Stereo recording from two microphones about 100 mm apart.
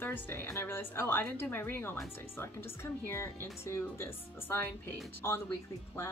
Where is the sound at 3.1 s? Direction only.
25° left (ahead or behind).